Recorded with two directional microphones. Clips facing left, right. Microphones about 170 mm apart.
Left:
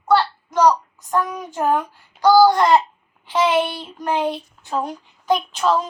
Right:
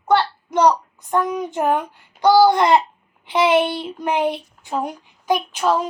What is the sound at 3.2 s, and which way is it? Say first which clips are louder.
A child's voice: right 2 dB; 15° right (ahead or behind).